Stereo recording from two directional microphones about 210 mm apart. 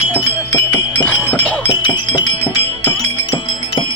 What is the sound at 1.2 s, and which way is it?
Chink, 5° left (ahead or behind).